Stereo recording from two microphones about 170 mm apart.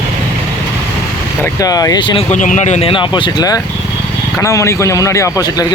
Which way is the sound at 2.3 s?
45° left (ahead or behind).